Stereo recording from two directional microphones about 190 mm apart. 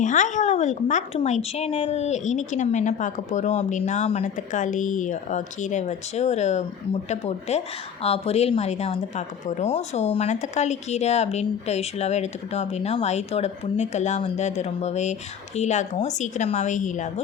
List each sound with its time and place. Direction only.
0.0 s speech: 40° left (ahead or behind)